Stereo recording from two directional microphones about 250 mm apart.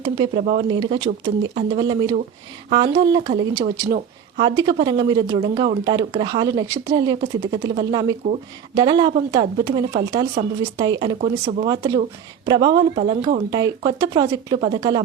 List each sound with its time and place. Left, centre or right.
0.0 s speech: right